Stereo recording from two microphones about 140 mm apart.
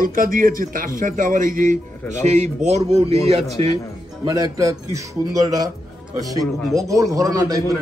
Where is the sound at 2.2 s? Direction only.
55° right (ahead or behind).